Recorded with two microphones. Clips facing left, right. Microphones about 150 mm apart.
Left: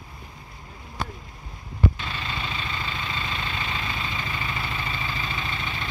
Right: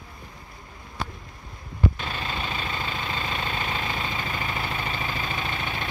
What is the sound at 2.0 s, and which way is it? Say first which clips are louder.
Vehicle: right 2 dB; 40° right (ahead or behind).